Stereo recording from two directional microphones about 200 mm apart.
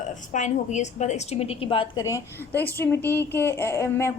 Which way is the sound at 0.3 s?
35° left (ahead or behind).